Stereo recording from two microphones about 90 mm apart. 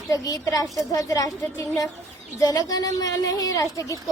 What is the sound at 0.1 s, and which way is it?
A woman's voice, 45° left (ahead or behind).